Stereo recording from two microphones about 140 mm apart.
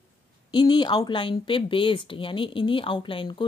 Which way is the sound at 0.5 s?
30° left (ahead or behind).